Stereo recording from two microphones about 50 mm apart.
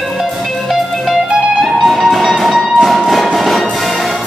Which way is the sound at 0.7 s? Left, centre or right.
Centre.